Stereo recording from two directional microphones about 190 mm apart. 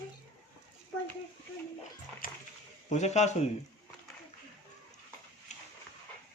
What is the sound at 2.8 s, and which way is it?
Speech, 35° left (ahead or behind).